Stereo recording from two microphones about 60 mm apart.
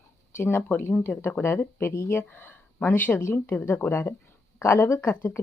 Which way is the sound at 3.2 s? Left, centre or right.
Left.